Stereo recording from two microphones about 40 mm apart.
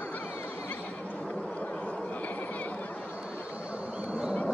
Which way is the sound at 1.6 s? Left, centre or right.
Left.